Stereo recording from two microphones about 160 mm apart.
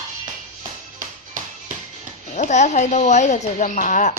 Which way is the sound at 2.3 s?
45° left (ahead or behind).